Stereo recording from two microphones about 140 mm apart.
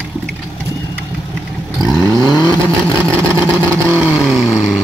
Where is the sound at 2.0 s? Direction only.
25° right (ahead or behind).